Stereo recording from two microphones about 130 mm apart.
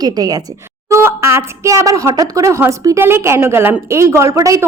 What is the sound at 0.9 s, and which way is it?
A woman's voice, 20° right (ahead or behind).